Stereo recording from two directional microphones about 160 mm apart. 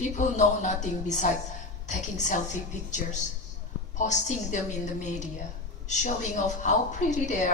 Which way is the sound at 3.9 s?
50° left (ahead or behind).